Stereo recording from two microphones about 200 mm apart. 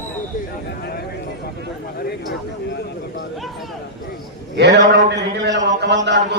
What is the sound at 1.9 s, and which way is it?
Speech, 55° left (ahead or behind).